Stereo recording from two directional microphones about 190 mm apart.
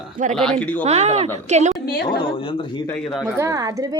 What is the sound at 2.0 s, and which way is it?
Speech, 25° left (ahead or behind).